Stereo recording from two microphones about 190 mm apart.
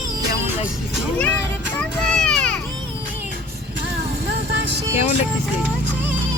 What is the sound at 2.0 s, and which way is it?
Children playing, 5° left (ahead or behind).